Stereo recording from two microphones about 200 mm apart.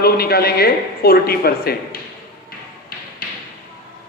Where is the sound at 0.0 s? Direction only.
50° left (ahead or behind).